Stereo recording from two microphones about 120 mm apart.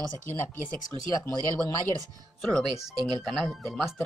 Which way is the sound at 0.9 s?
30° left (ahead or behind).